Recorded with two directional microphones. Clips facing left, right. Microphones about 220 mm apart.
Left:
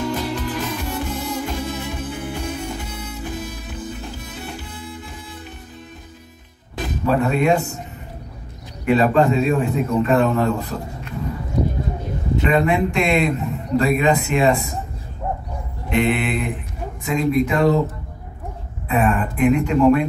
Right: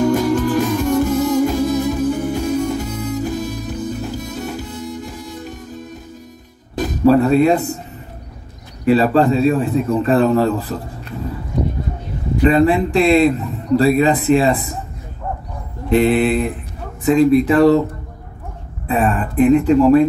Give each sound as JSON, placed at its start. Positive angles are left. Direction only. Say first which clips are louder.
{"t": 0.0, "sound": "music", "louder": "right 9 dB", "side_deg": -45}
{"t": 6.8, "sound": "speech", "louder": "right 7 dB", "side_deg": -35}
{"t": 8.8, "sound": "a man's voice", "louder": "right 3 dB", "side_deg": -35}
{"t": 12.4, "sound": "a man's voice", "louder": "right 5 dB", "side_deg": -35}
{"t": 15.9, "sound": "a man's voice", "louder": "right 6 dB", "side_deg": -35}
{"t": 18.9, "sound": "a man's voice", "louder": "right 1 dB", "side_deg": -35}